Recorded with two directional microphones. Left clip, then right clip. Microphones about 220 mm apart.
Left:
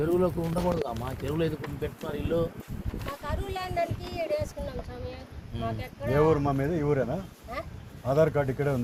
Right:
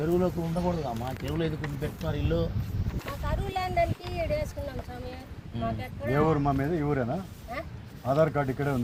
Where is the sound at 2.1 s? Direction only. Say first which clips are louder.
Left 2 dB; centre (ahead or behind).